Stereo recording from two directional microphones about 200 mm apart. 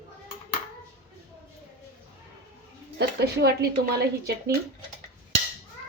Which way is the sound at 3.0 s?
55° right (ahead or behind).